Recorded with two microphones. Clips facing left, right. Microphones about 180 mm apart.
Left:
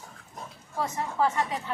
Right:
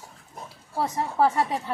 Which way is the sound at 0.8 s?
35° right (ahead or behind).